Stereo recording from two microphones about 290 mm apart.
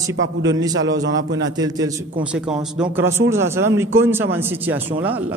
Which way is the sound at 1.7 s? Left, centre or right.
Centre.